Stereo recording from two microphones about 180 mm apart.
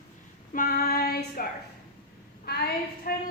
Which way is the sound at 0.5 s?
55° left (ahead or behind).